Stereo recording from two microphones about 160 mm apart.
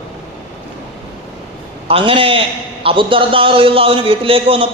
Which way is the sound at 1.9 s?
35° right (ahead or behind).